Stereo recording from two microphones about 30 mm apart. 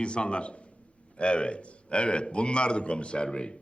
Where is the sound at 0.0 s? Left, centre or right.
Left.